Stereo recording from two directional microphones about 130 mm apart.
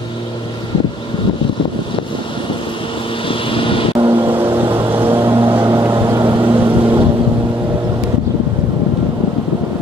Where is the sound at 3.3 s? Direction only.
40° left (ahead or behind).